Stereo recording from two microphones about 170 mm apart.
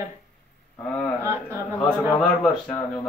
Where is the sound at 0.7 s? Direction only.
10° left (ahead or behind).